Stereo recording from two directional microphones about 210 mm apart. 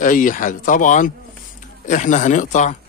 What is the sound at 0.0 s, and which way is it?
Speech, 40° left (ahead or behind).